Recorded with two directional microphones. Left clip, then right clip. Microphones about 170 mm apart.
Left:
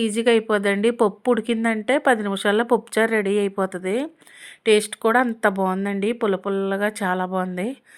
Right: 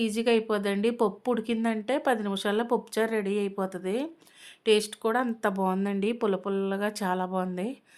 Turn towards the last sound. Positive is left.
turn(degrees=20)  # may be behind; listen again after turning